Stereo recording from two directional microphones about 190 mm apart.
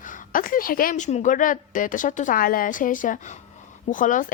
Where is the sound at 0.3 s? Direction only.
45° left (ahead or behind).